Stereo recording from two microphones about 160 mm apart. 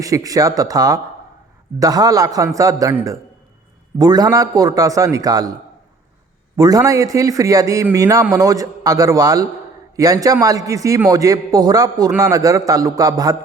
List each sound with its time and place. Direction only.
0.0 s a man's voice: 20° right (ahead or behind)
6.6 s a man's voice: 25° right (ahead or behind)